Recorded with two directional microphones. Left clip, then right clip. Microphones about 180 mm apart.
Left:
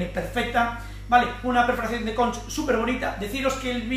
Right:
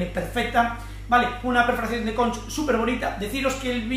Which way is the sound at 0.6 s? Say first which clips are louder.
Right 3 dB; 5° right (ahead or behind).